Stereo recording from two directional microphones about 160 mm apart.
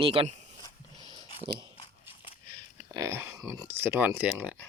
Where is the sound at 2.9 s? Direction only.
20° right (ahead or behind).